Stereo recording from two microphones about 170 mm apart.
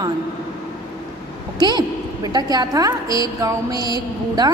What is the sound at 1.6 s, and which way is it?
A woman's voice, 25° right (ahead or behind).